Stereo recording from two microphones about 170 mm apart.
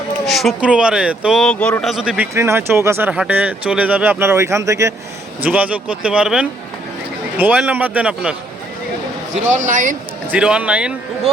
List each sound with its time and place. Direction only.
0.3 s speech: centre (ahead or behind)
9.3 s a man's voice: 45° right (ahead or behind)
10.3 s a man's voice: 5° right (ahead or behind)